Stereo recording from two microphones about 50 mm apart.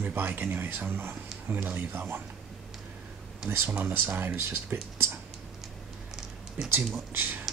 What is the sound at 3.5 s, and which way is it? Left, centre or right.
Speech, right.